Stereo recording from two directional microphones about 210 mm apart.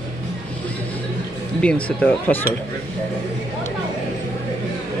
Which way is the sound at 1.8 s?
5° left (ahead or behind).